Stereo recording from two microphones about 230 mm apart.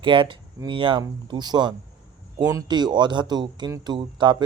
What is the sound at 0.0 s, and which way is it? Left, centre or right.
Speech, right.